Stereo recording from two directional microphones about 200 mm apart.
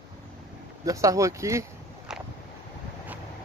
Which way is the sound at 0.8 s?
15° right (ahead or behind).